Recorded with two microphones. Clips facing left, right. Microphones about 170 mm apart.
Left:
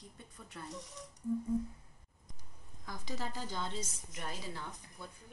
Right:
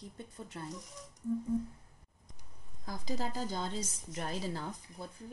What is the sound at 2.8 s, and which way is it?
Speech, 35° right (ahead or behind).